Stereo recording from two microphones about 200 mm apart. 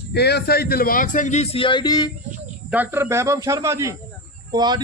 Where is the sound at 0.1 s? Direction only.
55° left (ahead or behind); by 2.1 s 20° left (ahead or behind).